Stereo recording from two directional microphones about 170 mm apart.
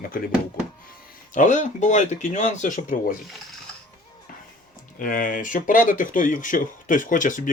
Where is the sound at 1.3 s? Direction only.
45° left (ahead or behind).